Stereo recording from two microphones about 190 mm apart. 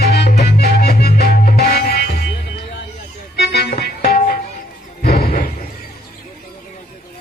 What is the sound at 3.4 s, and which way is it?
Organ, 60° left (ahead or behind).